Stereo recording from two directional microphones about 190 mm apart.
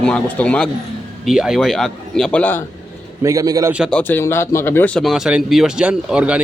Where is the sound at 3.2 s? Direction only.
15° right (ahead or behind).